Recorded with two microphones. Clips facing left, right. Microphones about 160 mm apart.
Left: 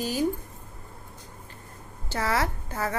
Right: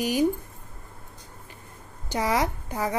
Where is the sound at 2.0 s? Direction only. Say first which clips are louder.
Right 2 dB; 15° right (ahead or behind).